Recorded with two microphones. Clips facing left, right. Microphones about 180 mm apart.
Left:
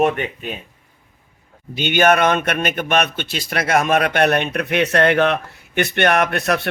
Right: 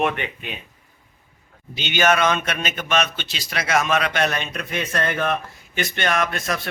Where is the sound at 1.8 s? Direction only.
55° left (ahead or behind).